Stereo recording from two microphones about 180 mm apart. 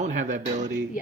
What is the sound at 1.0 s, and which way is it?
Speech, 50° left (ahead or behind).